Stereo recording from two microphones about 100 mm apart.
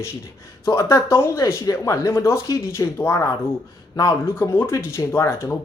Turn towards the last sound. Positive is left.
turn(degrees=25)  # may be behind; listen again after turning